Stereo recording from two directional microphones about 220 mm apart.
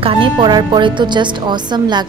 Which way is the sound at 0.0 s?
25° right (ahead or behind).